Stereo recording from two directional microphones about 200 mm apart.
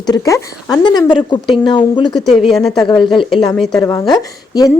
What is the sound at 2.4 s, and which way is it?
Speech, centre (ahead or behind).